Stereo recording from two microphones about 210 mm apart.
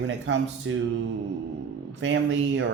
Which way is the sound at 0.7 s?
70° right (ahead or behind).